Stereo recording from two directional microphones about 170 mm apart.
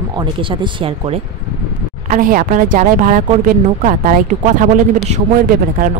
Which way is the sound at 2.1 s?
50° right (ahead or behind).